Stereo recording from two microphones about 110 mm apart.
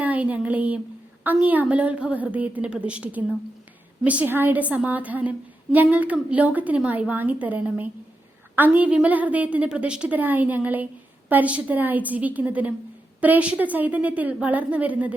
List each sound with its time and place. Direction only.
0.0 s a woman's voice: 15° right (ahead or behind)